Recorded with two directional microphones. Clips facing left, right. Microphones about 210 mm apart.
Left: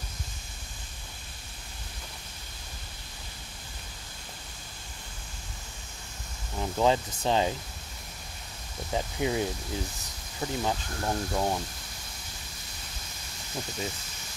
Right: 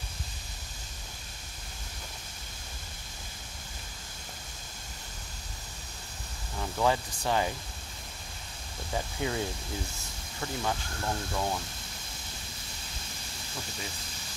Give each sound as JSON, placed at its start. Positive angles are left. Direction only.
{"t": 6.6, "sound": "speech", "side_deg": 20}
{"t": 8.9, "sound": "speech", "side_deg": 20}